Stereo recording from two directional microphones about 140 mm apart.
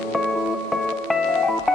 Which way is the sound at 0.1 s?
Centre (ahead or behind).